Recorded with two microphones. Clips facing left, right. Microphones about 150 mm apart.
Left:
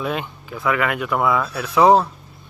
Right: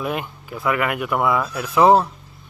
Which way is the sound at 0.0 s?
10° right (ahead or behind).